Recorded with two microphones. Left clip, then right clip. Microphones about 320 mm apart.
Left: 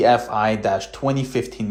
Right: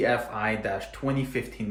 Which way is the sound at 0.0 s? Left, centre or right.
Centre.